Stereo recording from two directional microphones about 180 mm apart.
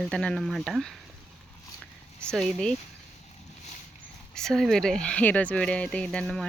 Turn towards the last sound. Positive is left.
turn(degrees=0)  # may be behind; listen again after turning